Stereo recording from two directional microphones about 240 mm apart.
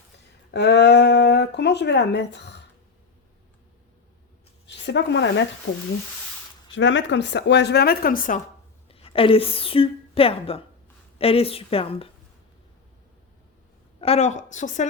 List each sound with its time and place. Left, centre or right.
0.5 s speech: left
4.6 s speech: left
5.7 s a woman's voice: left
6.7 s speech: left
8.9 s a woman's voice: left
14.0 s a woman's voice: left